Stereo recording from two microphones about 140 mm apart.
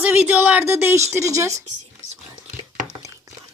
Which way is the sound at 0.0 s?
10° right (ahead or behind).